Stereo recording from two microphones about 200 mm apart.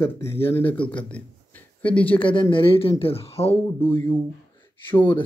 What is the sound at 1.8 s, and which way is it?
Speech, 5° left (ahead or behind).